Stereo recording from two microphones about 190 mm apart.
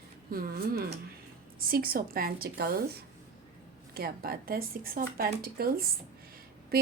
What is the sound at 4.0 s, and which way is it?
Speech, 55° right (ahead or behind).